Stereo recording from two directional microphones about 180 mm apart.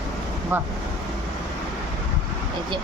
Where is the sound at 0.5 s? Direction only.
10° right (ahead or behind).